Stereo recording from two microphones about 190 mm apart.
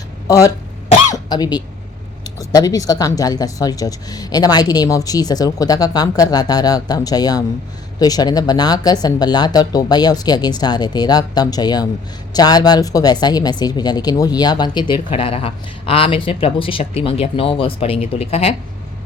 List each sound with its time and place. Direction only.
0.3 s speech: 20° left (ahead or behind)
1.1 s throat clearing: 20° left (ahead or behind)
2.2 s speech: 20° left (ahead or behind)